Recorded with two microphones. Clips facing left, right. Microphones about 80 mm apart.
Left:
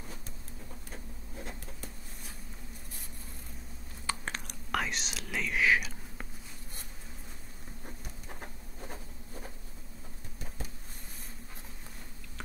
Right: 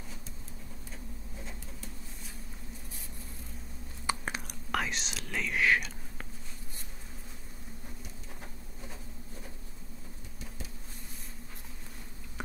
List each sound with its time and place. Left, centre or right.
4.1 s whispering: centre
8.3 s insect: left